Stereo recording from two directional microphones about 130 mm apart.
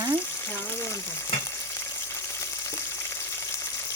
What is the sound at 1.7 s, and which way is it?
Frying, 20° left (ahead or behind).